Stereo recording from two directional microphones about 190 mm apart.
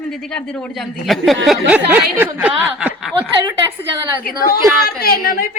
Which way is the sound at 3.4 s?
20° right (ahead or behind).